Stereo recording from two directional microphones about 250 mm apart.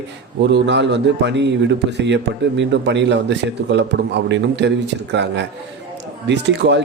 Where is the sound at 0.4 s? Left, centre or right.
Right.